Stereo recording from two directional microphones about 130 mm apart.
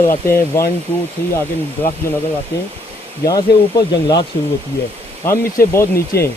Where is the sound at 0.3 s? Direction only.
20° left (ahead or behind).